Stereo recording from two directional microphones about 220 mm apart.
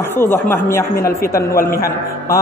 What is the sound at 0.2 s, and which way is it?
A man's voice, 10° left (ahead or behind).